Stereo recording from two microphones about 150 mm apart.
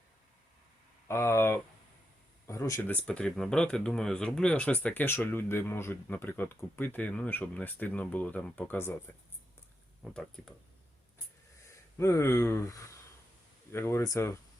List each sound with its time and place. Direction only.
1.0 s speech: 15° left (ahead or behind)
10.0 s speech: 5° left (ahead or behind)
11.9 s speech: 20° left (ahead or behind)